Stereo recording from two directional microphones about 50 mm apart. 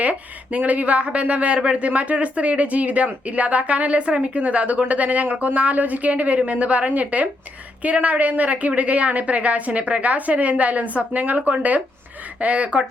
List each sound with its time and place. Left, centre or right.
0.0 s speech: right